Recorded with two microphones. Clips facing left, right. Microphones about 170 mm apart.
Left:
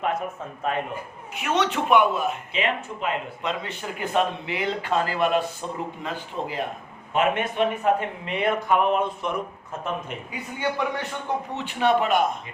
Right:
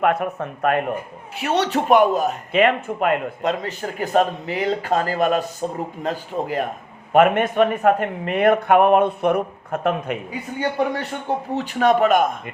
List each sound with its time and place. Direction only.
0.0 s speech: 65° right (ahead or behind)
1.4 s speech: 35° right (ahead or behind); by 10.2 s 65° right (ahead or behind)
11.5 s speech: 40° right (ahead or behind)